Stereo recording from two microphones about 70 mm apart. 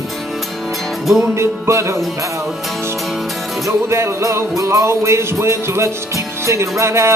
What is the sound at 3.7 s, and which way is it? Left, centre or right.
Music, right.